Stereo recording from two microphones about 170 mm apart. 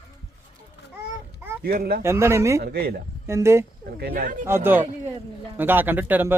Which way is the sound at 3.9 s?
65° right (ahead or behind).